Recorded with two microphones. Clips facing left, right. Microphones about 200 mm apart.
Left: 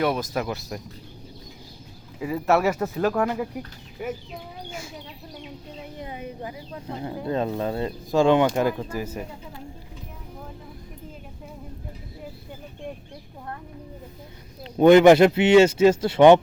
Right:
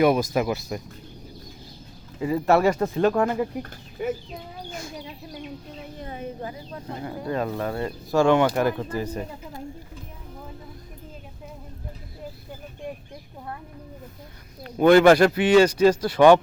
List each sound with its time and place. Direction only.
0.0 s speech: 10° right (ahead or behind)
2.2 s speech: 5° left (ahead or behind)
14.6 s speech: 20° left (ahead or behind)